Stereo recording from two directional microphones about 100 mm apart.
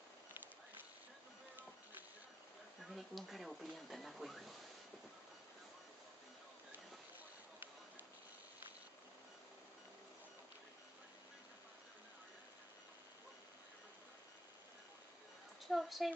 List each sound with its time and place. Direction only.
2.8 s speech: centre (ahead or behind)
15.6 s a woman's voice: centre (ahead or behind)